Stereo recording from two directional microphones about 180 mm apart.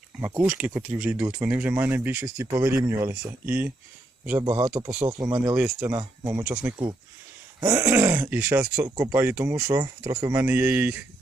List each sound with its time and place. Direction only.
0.2 s speech: 10° right (ahead or behind)
7.8 s speech: 10° right (ahead or behind)